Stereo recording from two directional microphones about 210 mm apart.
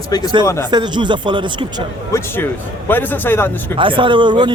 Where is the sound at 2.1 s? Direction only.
10° left (ahead or behind).